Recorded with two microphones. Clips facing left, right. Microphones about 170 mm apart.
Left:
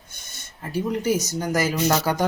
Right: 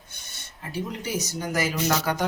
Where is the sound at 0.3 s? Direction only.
45° left (ahead or behind).